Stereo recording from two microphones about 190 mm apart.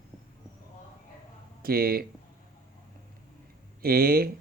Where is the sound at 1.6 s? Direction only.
55° right (ahead or behind).